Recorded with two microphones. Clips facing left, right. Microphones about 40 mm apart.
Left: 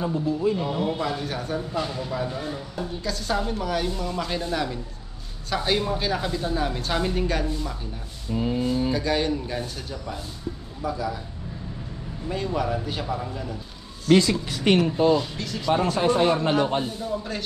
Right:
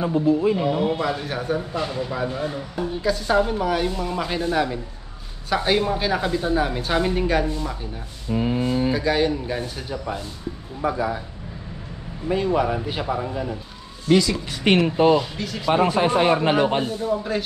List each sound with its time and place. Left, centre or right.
0.0 s a man's voice: centre
0.9 s speech: centre
8.3 s a man's voice: right
8.9 s speech: centre
10.8 s speech: right
12.3 s a man's voice: right
14.6 s a man's voice: right
15.3 s speech: centre
15.7 s a man's voice: right